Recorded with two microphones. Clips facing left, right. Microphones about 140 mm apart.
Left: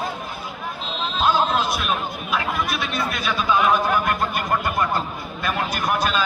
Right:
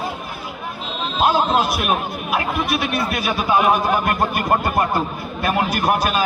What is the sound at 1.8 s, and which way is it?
Speech, 50° right (ahead or behind).